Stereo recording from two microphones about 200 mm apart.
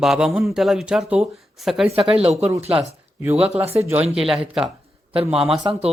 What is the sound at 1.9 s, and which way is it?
Speech, 30° right (ahead or behind).